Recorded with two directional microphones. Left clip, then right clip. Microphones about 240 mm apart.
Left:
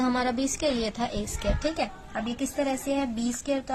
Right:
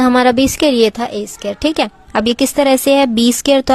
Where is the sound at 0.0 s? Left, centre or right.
Right.